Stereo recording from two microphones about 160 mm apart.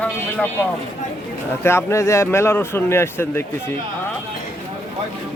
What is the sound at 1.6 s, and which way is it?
A man's voice, 15° left (ahead or behind).